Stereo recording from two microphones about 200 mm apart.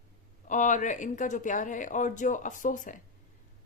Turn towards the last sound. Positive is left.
turn(degrees=40)  # may be behind; listen again after turning